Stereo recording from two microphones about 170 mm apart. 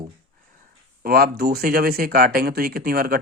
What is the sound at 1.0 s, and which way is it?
Speech, 60° right (ahead or behind).